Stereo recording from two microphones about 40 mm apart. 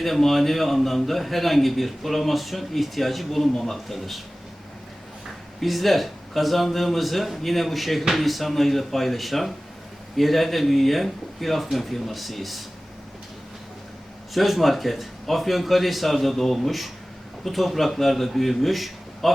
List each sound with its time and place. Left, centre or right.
0.0 s a man's voice: centre
5.5 s a man's voice: centre
14.3 s a man's voice: centre